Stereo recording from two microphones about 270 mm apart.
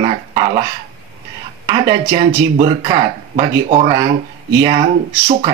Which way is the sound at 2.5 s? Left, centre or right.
Centre.